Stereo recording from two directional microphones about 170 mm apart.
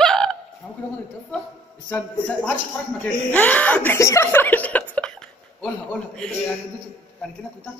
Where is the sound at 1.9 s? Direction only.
10° left (ahead or behind).